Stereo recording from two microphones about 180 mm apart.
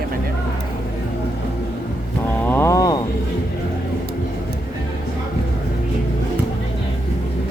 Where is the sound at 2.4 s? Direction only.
15° left (ahead or behind).